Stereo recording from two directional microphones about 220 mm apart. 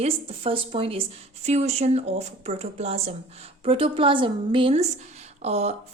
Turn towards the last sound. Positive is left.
turn(degrees=-30)  # may be behind; listen again after turning